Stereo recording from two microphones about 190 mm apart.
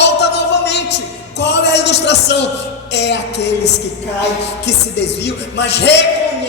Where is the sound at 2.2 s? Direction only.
65° left (ahead or behind).